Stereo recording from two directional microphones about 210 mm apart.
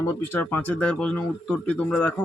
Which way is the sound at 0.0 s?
10° left (ahead or behind).